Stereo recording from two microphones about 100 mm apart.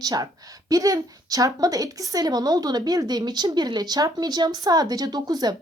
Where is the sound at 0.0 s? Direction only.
35° right (ahead or behind).